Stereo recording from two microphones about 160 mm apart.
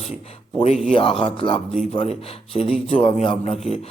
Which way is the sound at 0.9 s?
35° left (ahead or behind).